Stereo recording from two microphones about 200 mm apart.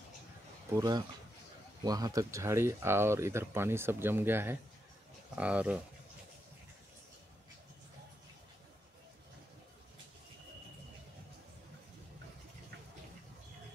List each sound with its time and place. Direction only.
0.7 s speech: 20° right (ahead or behind)